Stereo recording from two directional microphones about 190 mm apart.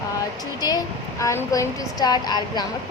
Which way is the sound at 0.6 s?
20° left (ahead or behind).